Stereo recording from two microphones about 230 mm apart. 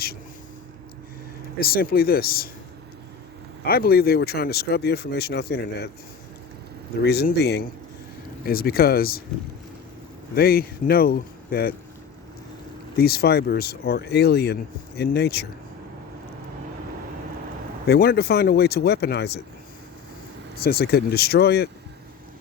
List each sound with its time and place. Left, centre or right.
1.5 s speech: left
3.6 s speech: left
7.0 s speech: left
10.3 s speech: left
13.0 s speech: left
17.8 s speech: left
20.6 s speech: left